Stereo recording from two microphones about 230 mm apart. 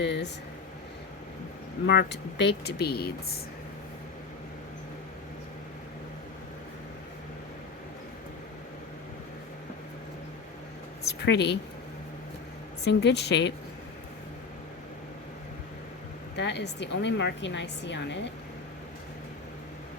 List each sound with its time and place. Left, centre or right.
0.0 s a woman's voice: left
1.9 s a woman's voice: left
11.0 s a sound: left
12.8 s a woman's voice: left
16.3 s a woman's voice: left